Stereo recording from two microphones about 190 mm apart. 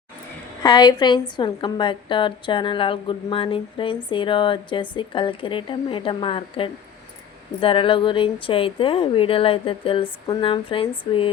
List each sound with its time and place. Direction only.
0.6 s a woman's voice: 20° left (ahead or behind)